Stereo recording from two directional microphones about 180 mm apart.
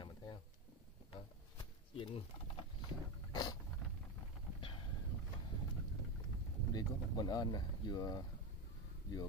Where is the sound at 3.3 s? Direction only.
20° left (ahead or behind).